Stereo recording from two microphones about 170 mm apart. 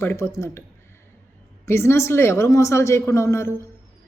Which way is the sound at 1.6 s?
15° left (ahead or behind).